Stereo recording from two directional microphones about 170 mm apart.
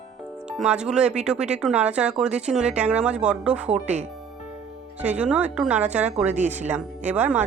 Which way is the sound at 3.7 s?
45° right (ahead or behind).